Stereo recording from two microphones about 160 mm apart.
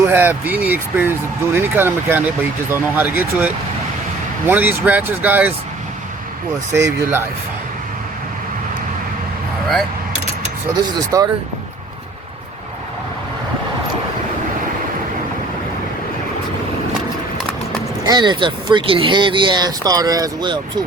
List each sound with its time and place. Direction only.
0.0 s speech: 15° right (ahead or behind)
6.7 s speech: 15° right (ahead or behind)
10.9 s speech: 25° right (ahead or behind)
17.7 s speech: 25° right (ahead or behind)